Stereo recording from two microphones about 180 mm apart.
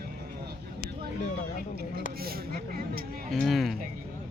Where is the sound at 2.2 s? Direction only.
55° right (ahead or behind).